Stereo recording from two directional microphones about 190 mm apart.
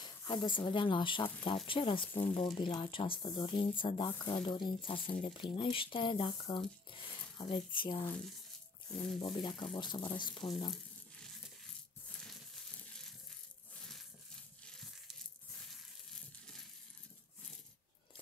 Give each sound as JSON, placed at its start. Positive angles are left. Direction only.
{"t": 0.0, "sound": "speech", "side_deg": 20}
{"t": 9.2, "sound": "speech", "side_deg": 25}
{"t": 14.6, "sound": "crumpling", "side_deg": 0}